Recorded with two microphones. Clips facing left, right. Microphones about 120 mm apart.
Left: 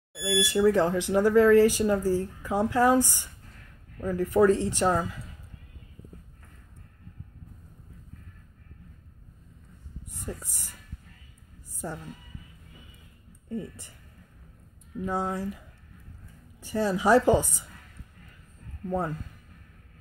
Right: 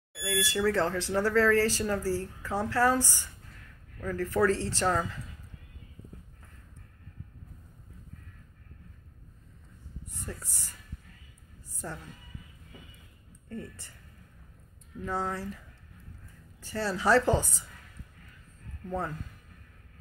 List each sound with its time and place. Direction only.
0.1 s speech: 15° left (ahead or behind)
10.0 s speech: 15° left (ahead or behind)
11.7 s music: 15° left (ahead or behind)
13.5 s speech: 15° left (ahead or behind)
15.0 s speech: 15° left (ahead or behind)
16.6 s speech: 15° left (ahead or behind)
18.9 s speech: 15° left (ahead or behind)